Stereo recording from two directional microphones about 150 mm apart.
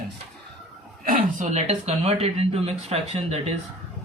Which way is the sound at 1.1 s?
50° right (ahead or behind).